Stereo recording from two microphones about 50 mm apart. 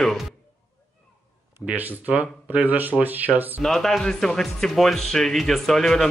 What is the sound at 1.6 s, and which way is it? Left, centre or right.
Speech, centre.